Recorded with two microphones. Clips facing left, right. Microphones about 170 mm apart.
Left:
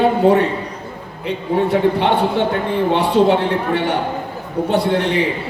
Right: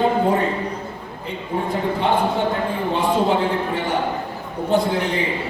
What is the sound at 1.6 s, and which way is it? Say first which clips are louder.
A man's voice: left 5 dB; 70° left (ahead or behind).